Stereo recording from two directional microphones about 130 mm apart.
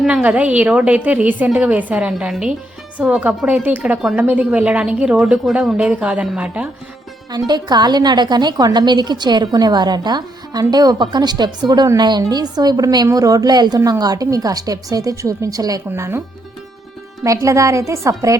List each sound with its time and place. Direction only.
0.0 s a woman's voice: 10° right (ahead or behind)
7.3 s a woman's voice: 30° right (ahead or behind)
17.2 s a woman's voice: 25° right (ahead or behind)